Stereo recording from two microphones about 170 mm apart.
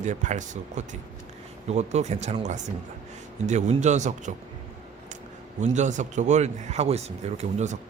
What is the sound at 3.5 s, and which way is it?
Speech, 45° right (ahead or behind).